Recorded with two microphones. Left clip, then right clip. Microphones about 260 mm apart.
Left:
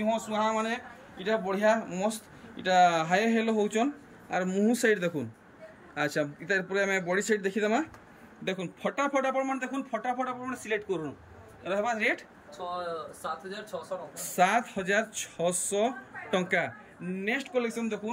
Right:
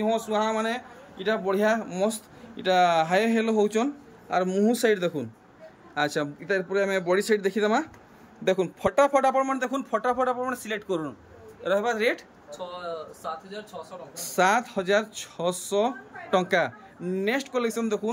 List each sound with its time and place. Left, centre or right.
0.0 s a man's voice: centre
14.1 s a man's voice: centre